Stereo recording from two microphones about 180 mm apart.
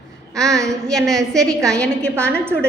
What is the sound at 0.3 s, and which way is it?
A woman's voice, centre (ahead or behind).